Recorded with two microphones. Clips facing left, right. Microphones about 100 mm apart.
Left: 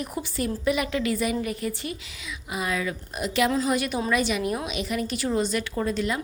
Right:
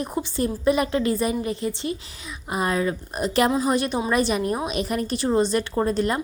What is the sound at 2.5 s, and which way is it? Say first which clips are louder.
A woman's voice: right 5 dB; 40° right (ahead or behind).